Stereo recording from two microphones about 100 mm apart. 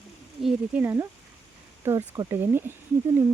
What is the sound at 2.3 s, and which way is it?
Speech, 20° right (ahead or behind).